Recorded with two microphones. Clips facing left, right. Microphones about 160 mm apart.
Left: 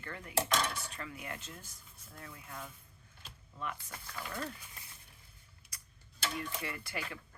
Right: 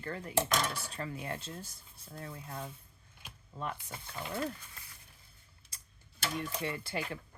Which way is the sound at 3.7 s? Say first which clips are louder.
Right 2 dB; 20° right (ahead or behind).